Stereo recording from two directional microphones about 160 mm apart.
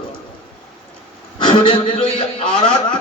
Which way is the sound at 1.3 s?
30° left (ahead or behind).